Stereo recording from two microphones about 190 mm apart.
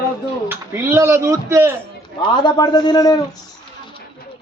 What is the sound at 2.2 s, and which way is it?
A man's voice, 25° left (ahead or behind).